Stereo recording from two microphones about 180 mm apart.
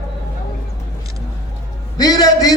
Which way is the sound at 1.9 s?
20° left (ahead or behind).